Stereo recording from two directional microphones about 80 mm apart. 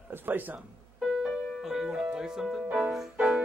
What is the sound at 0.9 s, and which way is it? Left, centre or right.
Speech, centre.